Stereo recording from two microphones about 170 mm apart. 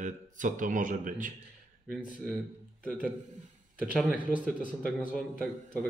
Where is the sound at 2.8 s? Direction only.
5° left (ahead or behind).